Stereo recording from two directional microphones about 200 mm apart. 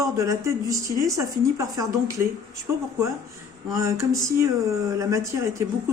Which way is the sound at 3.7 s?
15° right (ahead or behind).